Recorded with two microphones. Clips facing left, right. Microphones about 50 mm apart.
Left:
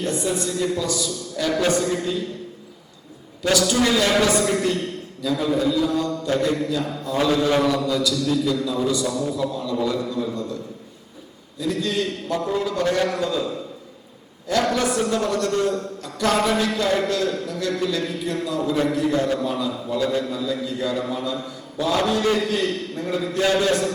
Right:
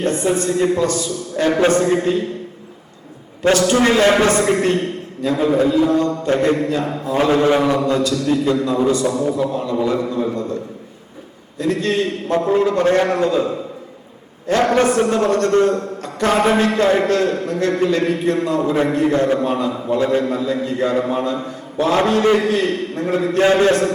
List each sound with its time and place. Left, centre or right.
0.0 s a man's voice: right
3.4 s a man's voice: right
9.5 s mantra: right
9.7 s a man's voice: right